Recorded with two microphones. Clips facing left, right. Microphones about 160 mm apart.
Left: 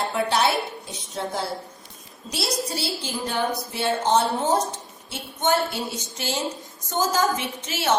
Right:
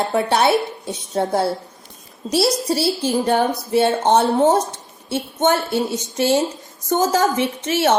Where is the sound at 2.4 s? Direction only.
60° right (ahead or behind).